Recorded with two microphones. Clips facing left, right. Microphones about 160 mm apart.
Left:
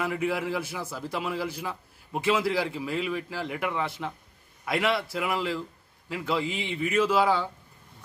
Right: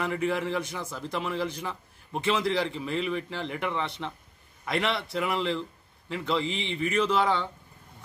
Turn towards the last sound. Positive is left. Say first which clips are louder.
# left 2 dB
turn(degrees=10)  # may be behind; listen again after turning